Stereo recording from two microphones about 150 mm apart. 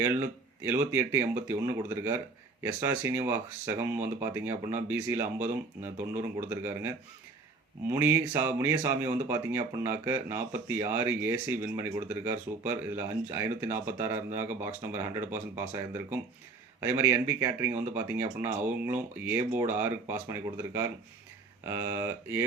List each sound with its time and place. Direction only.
0.0 s speech: 15° right (ahead or behind)